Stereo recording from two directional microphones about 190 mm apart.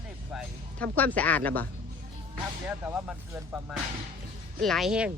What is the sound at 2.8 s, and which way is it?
Speech, 10° right (ahead or behind).